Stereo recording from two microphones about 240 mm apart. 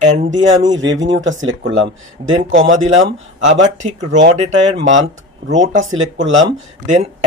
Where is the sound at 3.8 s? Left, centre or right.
Right.